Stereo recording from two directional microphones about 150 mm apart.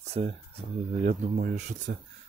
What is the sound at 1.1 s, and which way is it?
Speech, 65° right (ahead or behind).